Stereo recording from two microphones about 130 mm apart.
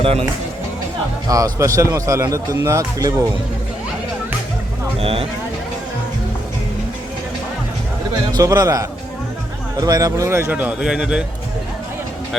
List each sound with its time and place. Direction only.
0.0 s speech: 50° right (ahead or behind)
1.5 s speech: 20° right (ahead or behind)
4.9 s speech: 45° right (ahead or behind)
8.3 s speech: 30° right (ahead or behind); by 11.3 s 5° right (ahead or behind)